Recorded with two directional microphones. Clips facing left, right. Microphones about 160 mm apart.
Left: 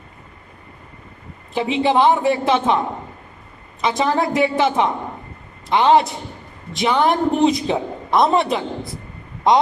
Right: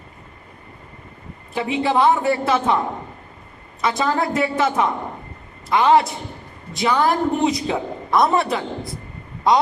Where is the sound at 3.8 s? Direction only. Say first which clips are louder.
Left 2 dB; 20° left (ahead or behind).